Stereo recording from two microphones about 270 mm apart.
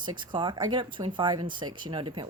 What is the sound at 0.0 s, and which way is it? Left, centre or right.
Speech, centre.